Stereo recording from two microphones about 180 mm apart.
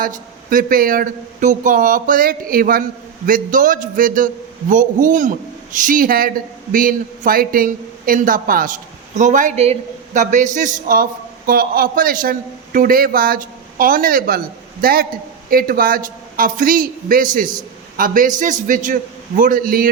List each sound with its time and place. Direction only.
0.0 s a man's voice: 50° right (ahead or behind)